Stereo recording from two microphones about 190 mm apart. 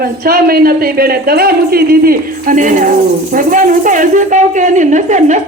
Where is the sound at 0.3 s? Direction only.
50° right (ahead or behind).